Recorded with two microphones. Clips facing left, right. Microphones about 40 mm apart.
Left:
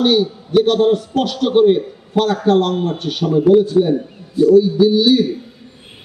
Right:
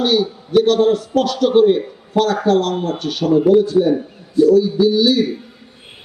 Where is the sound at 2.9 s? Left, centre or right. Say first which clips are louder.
Right 1 dB; centre.